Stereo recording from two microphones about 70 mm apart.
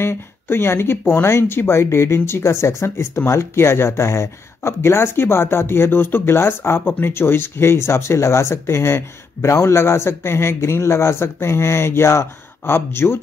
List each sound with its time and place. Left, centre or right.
0.0 s speech: left